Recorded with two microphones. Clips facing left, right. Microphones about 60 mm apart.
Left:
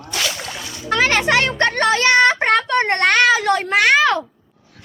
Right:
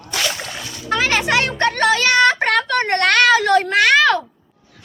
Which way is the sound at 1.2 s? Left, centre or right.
Left.